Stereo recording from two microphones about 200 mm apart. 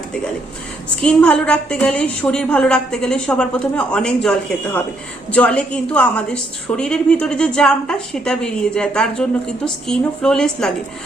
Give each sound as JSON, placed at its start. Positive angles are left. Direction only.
{"t": 1.0, "sound": "a woman's voice", "side_deg": 5}